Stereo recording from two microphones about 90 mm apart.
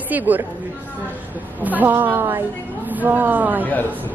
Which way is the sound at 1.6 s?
20° right (ahead or behind).